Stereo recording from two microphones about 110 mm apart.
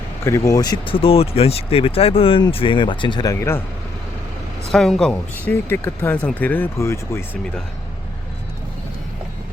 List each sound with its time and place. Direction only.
0.3 s speech: 30° left (ahead or behind)
0.9 s speech: 60° left (ahead or behind)
3.2 s speech: 25° left (ahead or behind)
4.7 s speech: 5° left (ahead or behind)
5.5 s speech: 20° left (ahead or behind)